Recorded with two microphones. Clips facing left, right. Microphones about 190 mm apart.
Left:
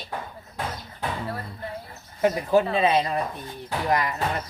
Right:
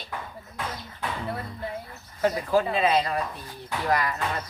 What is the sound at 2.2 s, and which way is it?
Speech, 20° left (ahead or behind).